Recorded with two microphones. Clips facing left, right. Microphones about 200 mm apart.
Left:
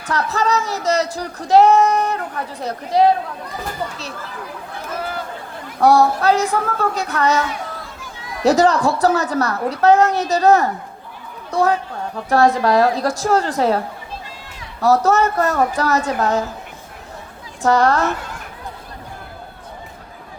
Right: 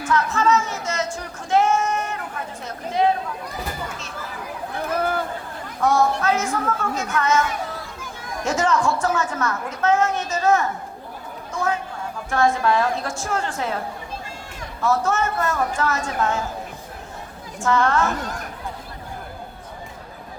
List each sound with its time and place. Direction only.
0.1 s speech: 35° left (ahead or behind)
5.8 s speech: 35° left (ahead or behind)
8.4 s speech: 35° left (ahead or behind)
17.6 s speech: 40° left (ahead or behind)